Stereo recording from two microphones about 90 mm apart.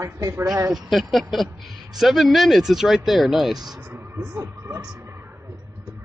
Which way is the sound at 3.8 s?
25° right (ahead or behind).